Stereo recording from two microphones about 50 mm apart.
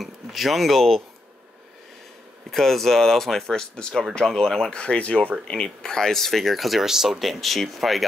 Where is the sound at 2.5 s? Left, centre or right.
Centre.